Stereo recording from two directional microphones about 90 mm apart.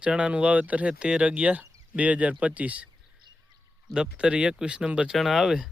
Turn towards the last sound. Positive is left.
turn(degrees=-5)  # may be behind; listen again after turning